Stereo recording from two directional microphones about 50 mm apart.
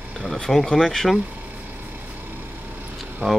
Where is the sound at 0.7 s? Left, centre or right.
Centre.